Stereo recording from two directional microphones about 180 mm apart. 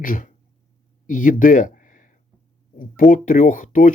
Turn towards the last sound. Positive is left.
turn(degrees=45)  # may be behind; listen again after turning